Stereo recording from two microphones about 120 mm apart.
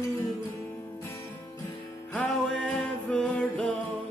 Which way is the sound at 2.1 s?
10° left (ahead or behind).